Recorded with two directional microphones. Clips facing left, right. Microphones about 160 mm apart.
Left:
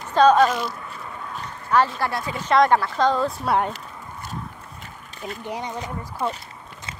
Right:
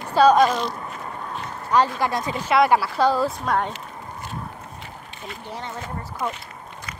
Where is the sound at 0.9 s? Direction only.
45° right (ahead or behind).